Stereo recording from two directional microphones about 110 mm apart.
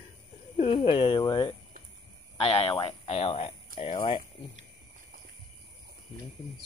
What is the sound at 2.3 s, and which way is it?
Speech, 65° left (ahead or behind).